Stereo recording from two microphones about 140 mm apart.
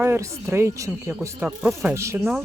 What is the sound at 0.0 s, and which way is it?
Speech, 15° right (ahead or behind).